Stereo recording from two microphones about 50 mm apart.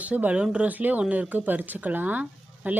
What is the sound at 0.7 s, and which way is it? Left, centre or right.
Speech, right.